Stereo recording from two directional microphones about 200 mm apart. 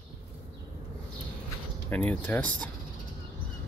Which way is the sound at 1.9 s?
10° left (ahead or behind).